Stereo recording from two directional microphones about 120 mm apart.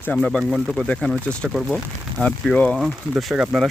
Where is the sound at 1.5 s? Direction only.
5° right (ahead or behind).